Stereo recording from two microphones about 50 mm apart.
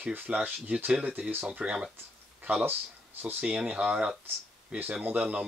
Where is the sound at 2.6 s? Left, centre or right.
Right.